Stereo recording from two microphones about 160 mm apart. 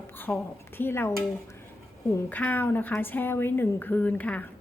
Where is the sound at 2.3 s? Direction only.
10° left (ahead or behind).